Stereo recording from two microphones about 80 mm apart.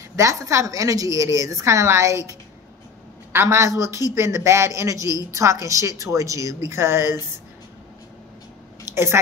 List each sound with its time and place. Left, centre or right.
0.1 s a woman's voice: right
3.4 s a woman's voice: right
8.9 s a woman's voice: right